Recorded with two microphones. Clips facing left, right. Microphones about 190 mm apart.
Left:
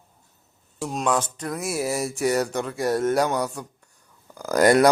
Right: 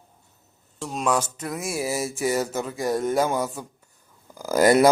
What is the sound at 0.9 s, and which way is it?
Speech, 5° right (ahead or behind).